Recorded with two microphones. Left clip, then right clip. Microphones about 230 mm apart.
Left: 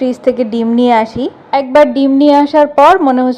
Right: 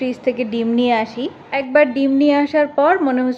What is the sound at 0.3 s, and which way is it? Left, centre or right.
A woman's voice, centre.